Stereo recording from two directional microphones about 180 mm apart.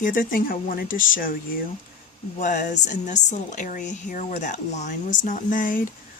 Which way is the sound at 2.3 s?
45° left (ahead or behind).